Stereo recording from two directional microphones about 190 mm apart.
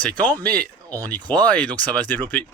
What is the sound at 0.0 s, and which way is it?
Speech, 10° left (ahead or behind).